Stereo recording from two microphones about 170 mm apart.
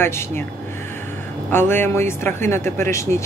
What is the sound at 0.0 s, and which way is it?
Speech, 15° left (ahead or behind).